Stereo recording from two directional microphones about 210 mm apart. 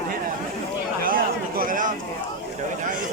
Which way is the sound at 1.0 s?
45° right (ahead or behind).